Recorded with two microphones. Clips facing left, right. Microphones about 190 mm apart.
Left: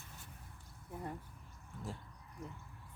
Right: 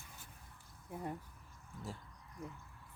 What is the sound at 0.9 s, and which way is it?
Speech, 10° right (ahead or behind).